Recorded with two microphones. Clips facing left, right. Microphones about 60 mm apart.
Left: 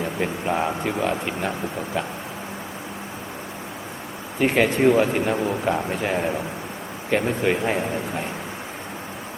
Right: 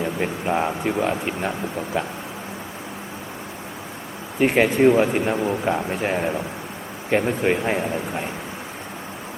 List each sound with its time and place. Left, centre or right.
0.0 s a man's voice: centre
4.4 s a man's voice: centre